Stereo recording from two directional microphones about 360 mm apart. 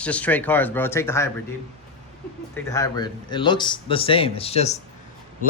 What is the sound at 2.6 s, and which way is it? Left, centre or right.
Speech, centre.